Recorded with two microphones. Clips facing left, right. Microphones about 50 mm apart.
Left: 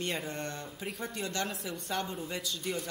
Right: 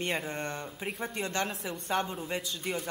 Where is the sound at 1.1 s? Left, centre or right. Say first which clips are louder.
Right 3 dB; right.